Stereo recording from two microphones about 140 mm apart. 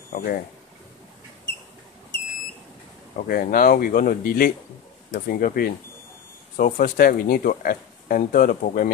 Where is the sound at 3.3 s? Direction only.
90° left.